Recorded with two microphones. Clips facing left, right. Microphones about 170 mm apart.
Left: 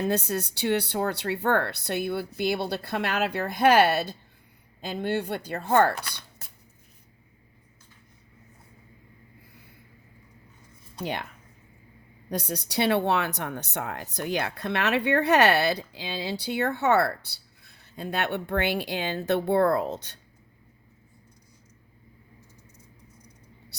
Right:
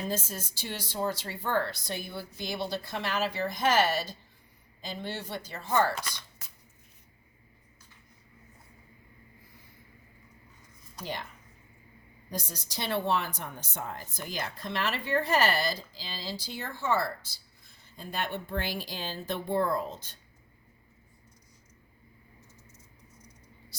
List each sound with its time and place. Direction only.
0.0 s speech: 70° left (ahead or behind)
11.0 s speech: 65° left (ahead or behind)
12.3 s a woman's voice: 65° left (ahead or behind)